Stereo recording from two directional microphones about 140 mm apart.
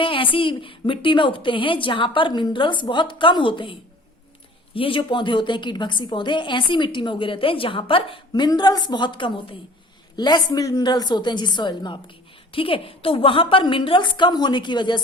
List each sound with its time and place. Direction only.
0.0 s a woman's voice: 40° left (ahead or behind)